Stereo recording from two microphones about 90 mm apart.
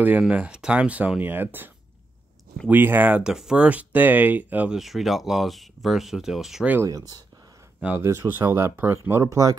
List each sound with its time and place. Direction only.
0.2 s speech: 10° right (ahead or behind)
2.7 s speech: 20° right (ahead or behind)
4.7 s speech: centre (ahead or behind)
6.8 s speech: 40° right (ahead or behind)